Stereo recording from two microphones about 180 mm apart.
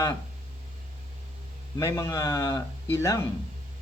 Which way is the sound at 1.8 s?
15° left (ahead or behind).